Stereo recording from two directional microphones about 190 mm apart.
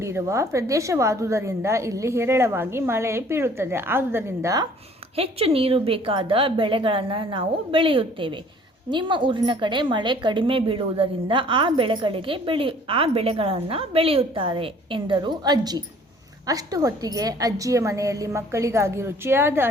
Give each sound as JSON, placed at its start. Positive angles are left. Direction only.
{"t": 0.0, "sound": "a woman's voice", "side_deg": -15}
{"t": 5.1, "sound": "a woman's voice", "side_deg": -30}